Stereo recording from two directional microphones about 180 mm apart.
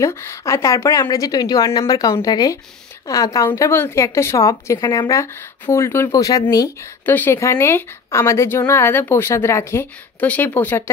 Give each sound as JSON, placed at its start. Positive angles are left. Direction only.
{"t": 0.0, "sound": "a woman's voice", "side_deg": 15}